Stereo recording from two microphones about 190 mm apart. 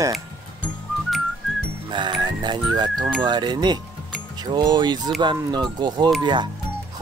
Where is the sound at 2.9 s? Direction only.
Centre (ahead or behind).